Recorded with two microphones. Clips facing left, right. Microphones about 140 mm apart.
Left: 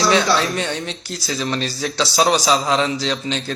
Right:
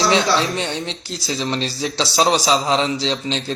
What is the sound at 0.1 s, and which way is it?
Speech, 25° right (ahead or behind).